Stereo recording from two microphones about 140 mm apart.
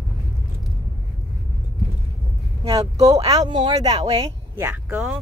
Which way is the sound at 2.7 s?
25° right (ahead or behind).